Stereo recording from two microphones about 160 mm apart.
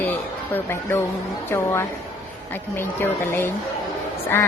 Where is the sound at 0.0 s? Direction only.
10° left (ahead or behind).